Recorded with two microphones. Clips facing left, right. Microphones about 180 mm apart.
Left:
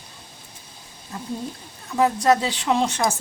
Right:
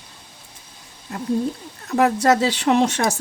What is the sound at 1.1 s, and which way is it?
Speech, 70° right (ahead or behind).